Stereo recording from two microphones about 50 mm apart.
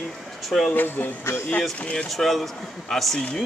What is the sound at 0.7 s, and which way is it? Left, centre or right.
Speech, left.